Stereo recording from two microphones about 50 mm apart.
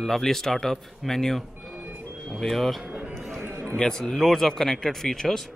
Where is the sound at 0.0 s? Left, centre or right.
Centre.